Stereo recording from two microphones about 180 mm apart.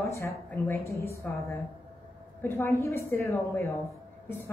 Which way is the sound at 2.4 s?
10° left (ahead or behind).